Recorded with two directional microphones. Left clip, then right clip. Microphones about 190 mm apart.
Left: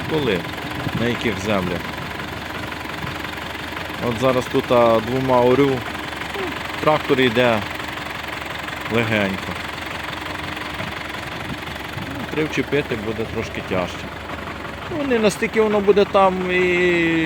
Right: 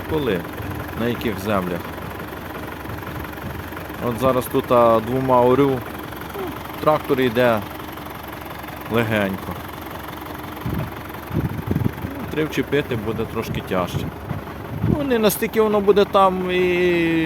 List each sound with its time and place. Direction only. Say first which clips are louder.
1.0 s speech: left 1 dB; centre (ahead or behind)
4.2 s speech: even; centre (ahead or behind)
6.8 s speech: left 1 dB; 10° left (ahead or behind)
8.9 s speech: even; centre (ahead or behind)
12.4 s speech: even; 5° right (ahead or behind)
15.1 s speech: left 1 dB; centre (ahead or behind)